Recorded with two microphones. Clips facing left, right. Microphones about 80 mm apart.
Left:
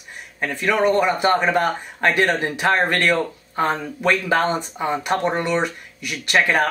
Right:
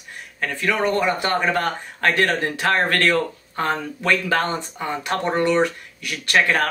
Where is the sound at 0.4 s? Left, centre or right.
Centre.